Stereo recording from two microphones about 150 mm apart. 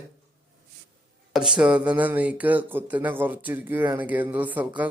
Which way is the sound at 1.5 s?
5° right (ahead or behind).